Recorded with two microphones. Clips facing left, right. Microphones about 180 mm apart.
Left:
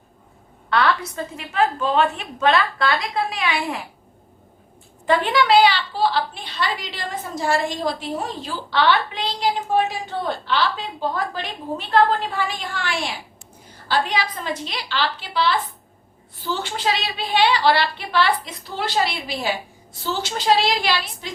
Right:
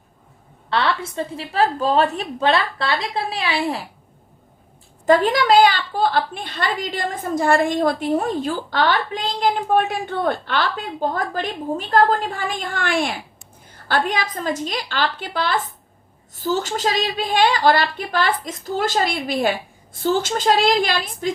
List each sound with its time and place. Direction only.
0.7 s a woman's voice: 30° right (ahead or behind)
5.0 s a woman's voice: 40° right (ahead or behind)